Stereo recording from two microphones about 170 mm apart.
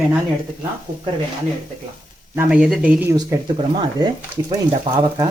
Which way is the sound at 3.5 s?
25° right (ahead or behind).